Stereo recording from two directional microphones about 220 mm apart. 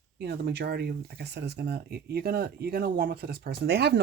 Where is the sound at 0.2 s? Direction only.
50° right (ahead or behind).